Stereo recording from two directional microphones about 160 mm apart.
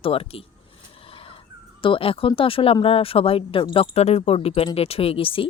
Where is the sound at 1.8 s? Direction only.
35° left (ahead or behind).